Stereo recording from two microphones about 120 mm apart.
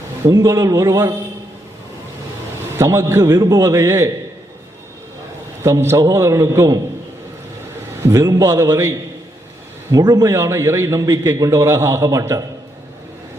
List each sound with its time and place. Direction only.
0.3 s a man's voice: 30° right (ahead or behind)
2.7 s a man's voice: 25° right (ahead or behind)
5.6 s a man's voice: 25° right (ahead or behind)
8.0 s a man's voice: 30° right (ahead or behind)